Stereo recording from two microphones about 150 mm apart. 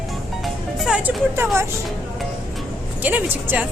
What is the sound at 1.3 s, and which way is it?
Speech, 20° right (ahead or behind).